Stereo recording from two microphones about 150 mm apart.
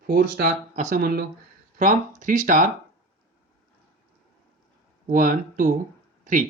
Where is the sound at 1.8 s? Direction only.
60° right (ahead or behind).